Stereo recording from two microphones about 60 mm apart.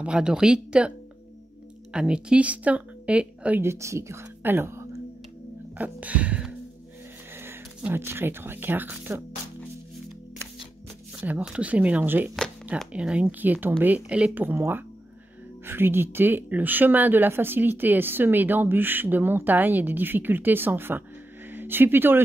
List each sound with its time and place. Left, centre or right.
0.0 s a woman's voice: centre
3.6 s a woman's voice: right
4.4 s whispering: right
5.8 s a woman's voice: right
7.9 s speech: right
11.1 s a woman's voice: right
12.0 s speech: right
12.9 s a woman's voice: right
14.3 s speech: right